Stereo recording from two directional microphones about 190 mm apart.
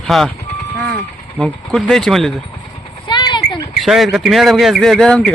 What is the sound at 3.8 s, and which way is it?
Speech, centre (ahead or behind).